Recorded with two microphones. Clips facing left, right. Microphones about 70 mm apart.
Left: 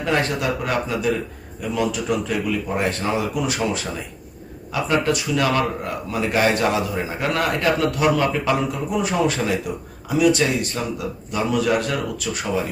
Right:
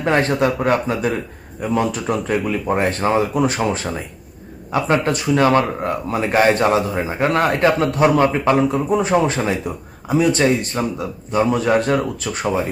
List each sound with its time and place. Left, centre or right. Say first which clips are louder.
0.0 s speech: right 5 dB; right